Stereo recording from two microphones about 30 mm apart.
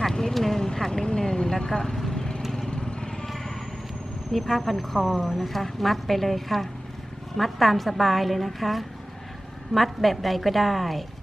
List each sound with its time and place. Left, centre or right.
0.3 s vehicle: centre
0.6 s vehicle: centre
1.0 s speech: left
2.0 s vehicle: left
4.3 s a woman's voice: centre